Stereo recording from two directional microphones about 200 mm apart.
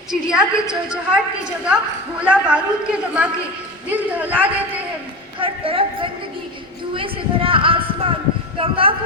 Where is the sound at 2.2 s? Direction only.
5° right (ahead or behind).